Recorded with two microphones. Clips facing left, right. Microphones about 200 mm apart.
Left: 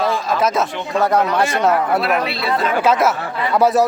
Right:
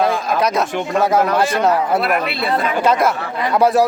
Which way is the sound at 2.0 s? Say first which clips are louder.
Even; 50° right (ahead or behind).